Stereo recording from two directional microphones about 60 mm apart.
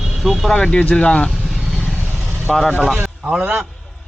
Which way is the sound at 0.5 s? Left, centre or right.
Centre.